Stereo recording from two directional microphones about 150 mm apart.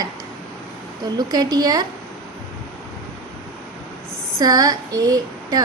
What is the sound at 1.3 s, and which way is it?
Speech, 25° right (ahead or behind).